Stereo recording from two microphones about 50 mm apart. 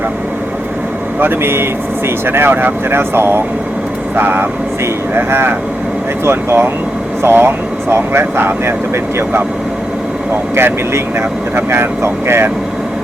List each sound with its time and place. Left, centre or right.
1.2 s speech: right
10.5 s speech: right